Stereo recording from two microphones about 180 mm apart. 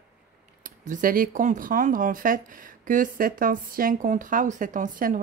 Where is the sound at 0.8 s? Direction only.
50° right (ahead or behind).